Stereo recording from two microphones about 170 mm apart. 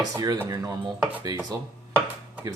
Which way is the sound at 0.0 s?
20° right (ahead or behind).